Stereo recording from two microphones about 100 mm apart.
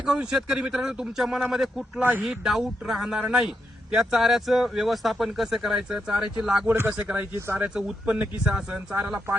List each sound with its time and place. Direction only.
0.0 s speech: 5° right (ahead or behind)
2.0 s speech: 15° right (ahead or behind)
2.2 s speech: 5° right (ahead or behind)
6.7 s a man's voice: 20° right (ahead or behind)
7.7 s speech: 5° right (ahead or behind)